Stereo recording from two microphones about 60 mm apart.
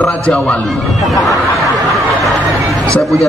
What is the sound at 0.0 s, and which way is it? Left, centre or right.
Speech, left.